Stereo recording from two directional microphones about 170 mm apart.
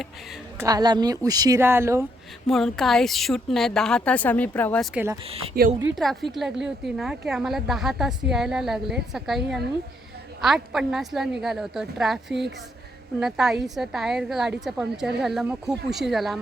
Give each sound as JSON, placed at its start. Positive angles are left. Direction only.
{"t": 0.6, "sound": "speech", "side_deg": -25}
{"t": 2.5, "sound": "a woman's voice", "side_deg": 0}
{"t": 5.5, "sound": "speech", "side_deg": -65}
{"t": 6.0, "sound": "a woman's voice", "side_deg": 0}